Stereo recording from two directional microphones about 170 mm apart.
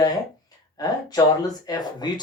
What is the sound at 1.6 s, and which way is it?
Speech, 25° left (ahead or behind).